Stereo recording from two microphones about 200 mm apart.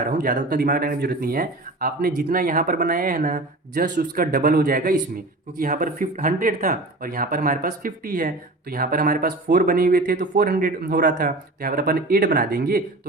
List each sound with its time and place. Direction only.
0.0 s speech: 40° right (ahead or behind)